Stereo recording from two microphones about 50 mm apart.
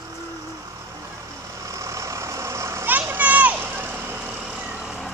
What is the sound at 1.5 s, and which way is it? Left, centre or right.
Vehicle, right.